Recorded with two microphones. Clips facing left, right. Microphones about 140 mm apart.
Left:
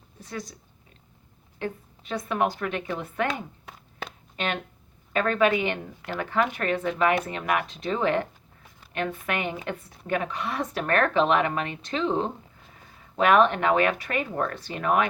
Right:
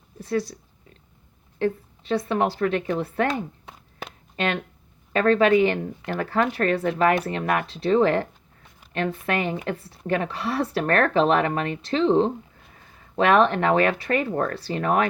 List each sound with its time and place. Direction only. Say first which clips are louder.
0.2 s a woman's voice: right 11 dB; 35° right (ahead or behind)
1.5 s a woman's voice: right 8 dB; 35° right (ahead or behind)
5.1 s a woman's voice: right 5 dB; 35° right (ahead or behind)